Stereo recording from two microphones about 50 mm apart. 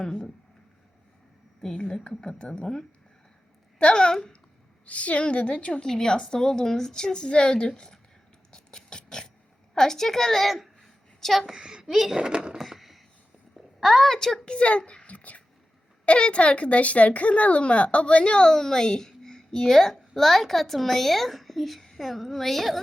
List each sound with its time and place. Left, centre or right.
1.6 s a woman's voice: centre
5.8 s speech: centre
8.5 s a sound: centre
9.7 s a woman's voice: centre
12.6 s chop: centre
13.7 s speech: centre
14.4 s a child's voice: left; by 22.8 s centre